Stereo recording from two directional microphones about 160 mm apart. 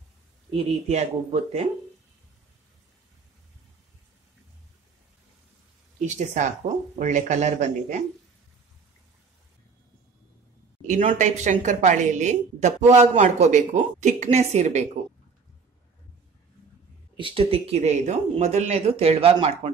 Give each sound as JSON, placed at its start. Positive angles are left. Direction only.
{"t": 0.7, "sound": "a woman's voice", "side_deg": -45}
{"t": 6.0, "sound": "a woman's voice", "side_deg": -50}
{"t": 10.9, "sound": "a woman's voice", "side_deg": -50}
{"t": 17.2, "sound": "speech", "side_deg": -35}